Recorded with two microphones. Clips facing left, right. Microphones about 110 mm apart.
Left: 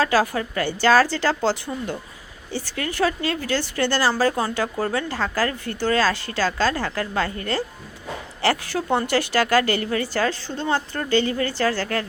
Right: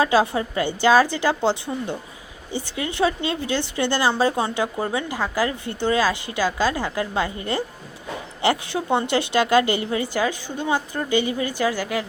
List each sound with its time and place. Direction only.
0.0 s speech: 20° right (ahead or behind)